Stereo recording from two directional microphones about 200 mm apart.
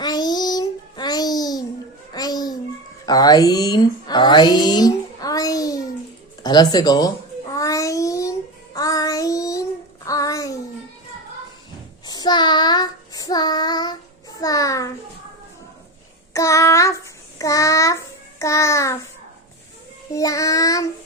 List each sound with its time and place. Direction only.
0.0 s child singing: 20° left (ahead or behind)
3.1 s speech: 20° left (ahead or behind)
7.5 s child singing: 15° left (ahead or behind)
10.1 s a sound: 15° left (ahead or behind)
12.0 s child singing: 20° left (ahead or behind)
16.3 s child singing: 15° left (ahead or behind)
20.1 s child singing: 15° left (ahead or behind)